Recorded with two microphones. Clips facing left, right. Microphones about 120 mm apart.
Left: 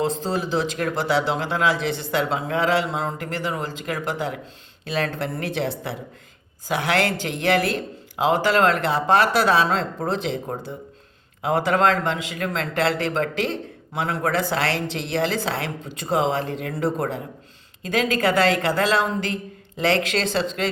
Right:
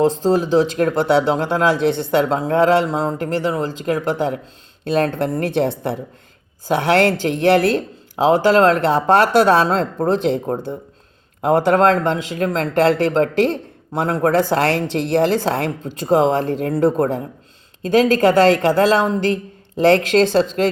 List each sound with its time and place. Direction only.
0.3 s a woman's voice: 40° right (ahead or behind)
1.7 s speech: 5° left (ahead or behind)
2.3 s a woman's voice: 40° right (ahead or behind)